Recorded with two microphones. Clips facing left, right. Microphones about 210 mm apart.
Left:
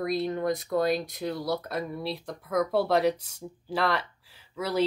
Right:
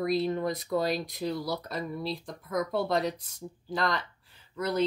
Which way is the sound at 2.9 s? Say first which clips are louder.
Left 5 dB; 65° left (ahead or behind).